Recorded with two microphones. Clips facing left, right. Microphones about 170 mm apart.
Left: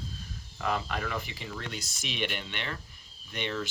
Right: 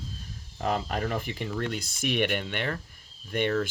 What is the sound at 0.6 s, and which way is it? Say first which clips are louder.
Speech: right 3 dB; 40° right (ahead or behind).